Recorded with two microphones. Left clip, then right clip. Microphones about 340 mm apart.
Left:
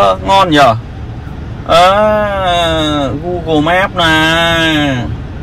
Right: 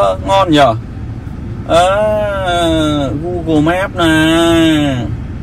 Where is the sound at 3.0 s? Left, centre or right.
Left.